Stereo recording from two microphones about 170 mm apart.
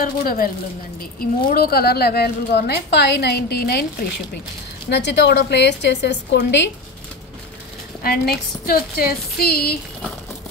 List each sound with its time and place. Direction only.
0.0 s a woman's voice: 55° left (ahead or behind)
1.5 s a woman's voice: 65° left (ahead or behind)
4.8 s a woman's voice: 85° left
8.0 s a woman's voice: 65° left (ahead or behind)